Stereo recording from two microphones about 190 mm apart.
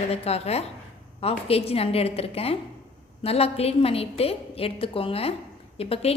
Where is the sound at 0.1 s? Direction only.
35° left (ahead or behind).